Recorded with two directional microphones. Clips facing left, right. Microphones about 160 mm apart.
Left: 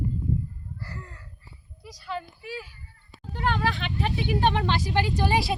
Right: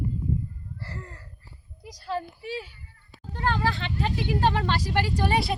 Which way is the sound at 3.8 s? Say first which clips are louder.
Even; 15° left (ahead or behind).